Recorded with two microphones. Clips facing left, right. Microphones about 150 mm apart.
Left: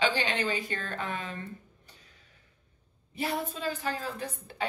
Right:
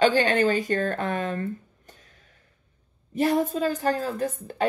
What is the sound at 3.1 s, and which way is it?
A woman's voice, 45° right (ahead or behind).